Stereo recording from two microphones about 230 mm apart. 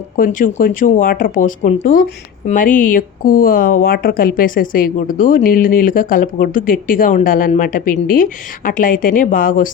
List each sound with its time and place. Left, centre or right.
0.2 s a woman's voice: left